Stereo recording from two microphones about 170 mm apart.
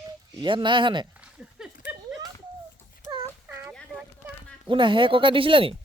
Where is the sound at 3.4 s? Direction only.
15° right (ahead or behind).